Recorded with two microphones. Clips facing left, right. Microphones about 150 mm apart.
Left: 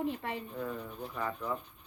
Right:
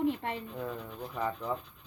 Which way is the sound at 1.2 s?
15° right (ahead or behind).